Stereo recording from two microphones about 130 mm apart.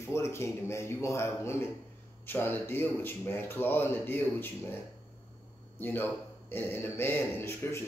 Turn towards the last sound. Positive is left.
turn(degrees=20)  # may be behind; listen again after turning